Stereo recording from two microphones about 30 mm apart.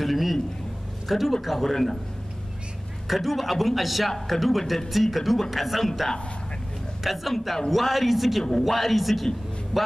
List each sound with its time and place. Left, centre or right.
0.0 s a sound: centre
1.0 s speech: centre
1.7 s a man's voice: centre
3.1 s speech: centre
7.0 s speech: centre
8.5 s a man's voice: centre
8.7 s speech: centre